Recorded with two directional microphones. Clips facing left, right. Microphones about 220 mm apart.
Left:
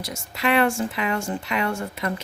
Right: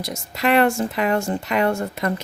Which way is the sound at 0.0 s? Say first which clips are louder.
Right 3 dB; 40° right (ahead or behind).